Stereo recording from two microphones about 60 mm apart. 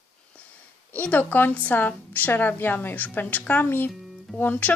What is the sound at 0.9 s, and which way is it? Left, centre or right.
A woman's voice, left.